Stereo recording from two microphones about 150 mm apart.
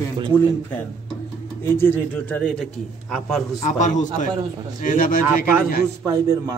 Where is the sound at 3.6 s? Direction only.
55° left (ahead or behind).